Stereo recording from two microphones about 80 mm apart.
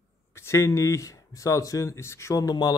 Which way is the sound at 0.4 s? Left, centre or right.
Left.